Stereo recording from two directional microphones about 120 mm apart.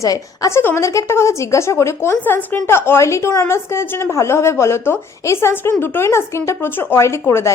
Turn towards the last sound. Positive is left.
turn(degrees=20)  # may be behind; listen again after turning